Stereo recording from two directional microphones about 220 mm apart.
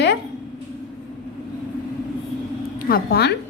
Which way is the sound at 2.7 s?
45° left (ahead or behind).